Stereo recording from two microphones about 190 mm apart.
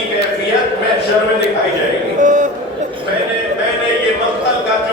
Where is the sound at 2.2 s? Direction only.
40° right (ahead or behind).